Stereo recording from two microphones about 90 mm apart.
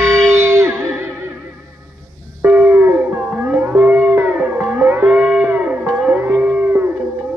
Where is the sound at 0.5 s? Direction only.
35° right (ahead or behind).